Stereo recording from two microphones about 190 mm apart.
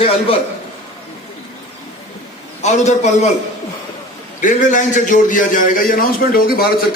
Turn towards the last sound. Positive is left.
turn(degrees=50)  # may be behind; listen again after turning